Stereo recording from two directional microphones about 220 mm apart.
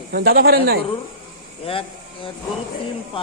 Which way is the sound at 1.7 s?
25° left (ahead or behind).